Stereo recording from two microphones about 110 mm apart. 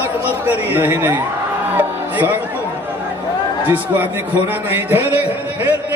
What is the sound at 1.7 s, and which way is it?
Music, 15° right (ahead or behind).